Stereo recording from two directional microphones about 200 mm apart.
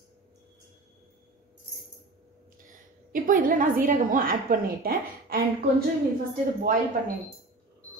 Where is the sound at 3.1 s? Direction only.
40° right (ahead or behind).